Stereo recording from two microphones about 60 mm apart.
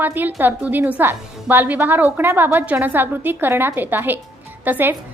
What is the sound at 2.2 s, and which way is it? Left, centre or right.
A woman's voice, right.